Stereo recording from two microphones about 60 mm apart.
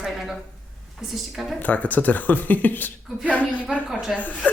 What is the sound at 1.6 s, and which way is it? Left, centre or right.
Speech, left.